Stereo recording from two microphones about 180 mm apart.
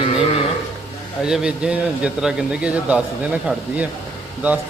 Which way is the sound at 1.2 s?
5° right (ahead or behind).